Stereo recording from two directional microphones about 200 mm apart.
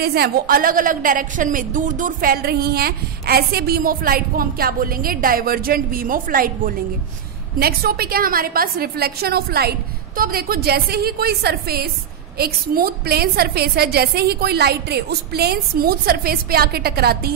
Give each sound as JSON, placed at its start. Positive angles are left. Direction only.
{"t": 0.0, "sound": "a woman's voice", "side_deg": -50}